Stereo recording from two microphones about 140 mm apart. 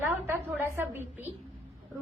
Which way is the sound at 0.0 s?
15° right (ahead or behind).